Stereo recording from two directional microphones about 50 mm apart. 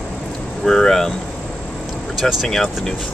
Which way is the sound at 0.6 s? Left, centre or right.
Centre.